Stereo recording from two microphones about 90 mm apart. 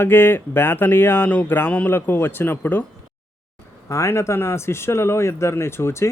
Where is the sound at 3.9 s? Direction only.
30° left (ahead or behind).